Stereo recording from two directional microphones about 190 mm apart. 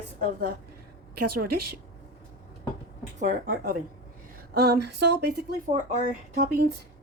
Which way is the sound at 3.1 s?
45° right (ahead or behind).